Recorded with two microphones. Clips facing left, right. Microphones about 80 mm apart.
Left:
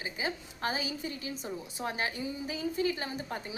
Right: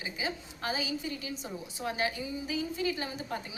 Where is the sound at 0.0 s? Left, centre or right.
Left.